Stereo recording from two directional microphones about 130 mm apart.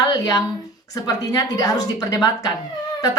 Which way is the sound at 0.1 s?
25° left (ahead or behind).